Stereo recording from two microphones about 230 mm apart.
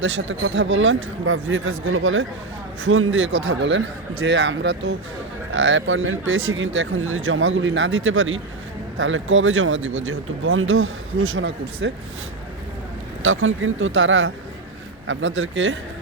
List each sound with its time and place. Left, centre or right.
0.0 s speech: right
13.2 s speech: right